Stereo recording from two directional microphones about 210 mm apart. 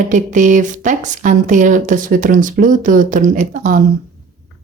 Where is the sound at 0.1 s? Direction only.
35° right (ahead or behind).